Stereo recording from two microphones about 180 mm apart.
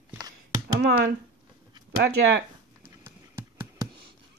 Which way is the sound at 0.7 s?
70° right (ahead or behind).